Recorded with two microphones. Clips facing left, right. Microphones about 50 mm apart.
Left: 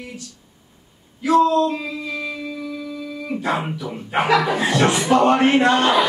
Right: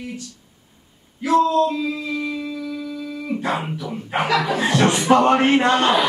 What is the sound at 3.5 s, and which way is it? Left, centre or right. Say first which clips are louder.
Male singing: left 1 dB; centre.